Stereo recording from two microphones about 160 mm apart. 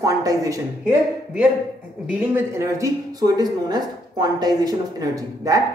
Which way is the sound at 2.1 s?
15° right (ahead or behind).